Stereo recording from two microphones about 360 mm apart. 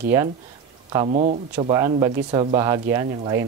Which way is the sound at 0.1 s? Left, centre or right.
Centre.